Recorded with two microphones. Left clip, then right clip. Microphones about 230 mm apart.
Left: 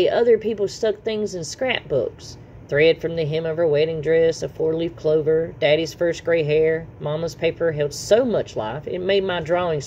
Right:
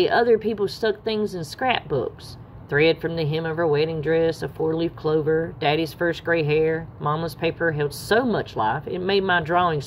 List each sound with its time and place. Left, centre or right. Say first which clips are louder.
0.0 s speech: left 2 dB; centre